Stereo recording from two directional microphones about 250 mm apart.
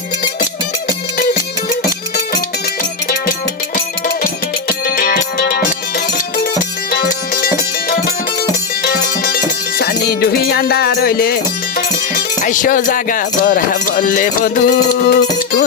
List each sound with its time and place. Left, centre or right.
4.9 s music: left
6.9 s music: left
12.1 s speech: left